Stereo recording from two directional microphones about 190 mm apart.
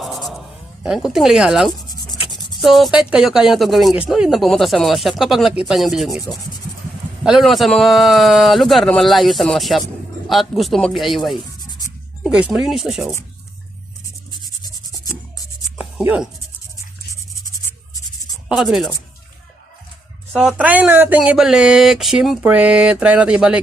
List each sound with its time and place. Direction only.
0.0 s a sound: centre (ahead or behind)
2.1 s rub: 25° left (ahead or behind)
2.6 s speech: centre (ahead or behind)
7.3 s speech: centre (ahead or behind)
14.4 s a sound: 20° left (ahead or behind)
15.8 s writing: 5° right (ahead or behind)
17.7 s writing: 20° left (ahead or behind)
18.4 s speech: centre (ahead or behind)
20.3 s speech: centre (ahead or behind)